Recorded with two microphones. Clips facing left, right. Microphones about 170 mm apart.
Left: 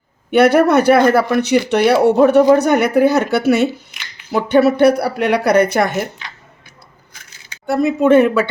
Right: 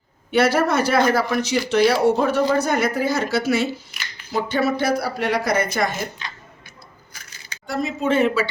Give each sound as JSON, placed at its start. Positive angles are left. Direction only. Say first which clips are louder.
{"t": 0.3, "sound": "speech", "louder": "left 7 dB", "side_deg": 60}
{"t": 7.7, "sound": "speech", "louder": "left 10 dB", "side_deg": 60}